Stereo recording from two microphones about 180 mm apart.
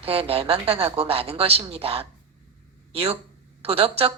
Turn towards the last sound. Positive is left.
turn(degrees=-30)  # may be behind; listen again after turning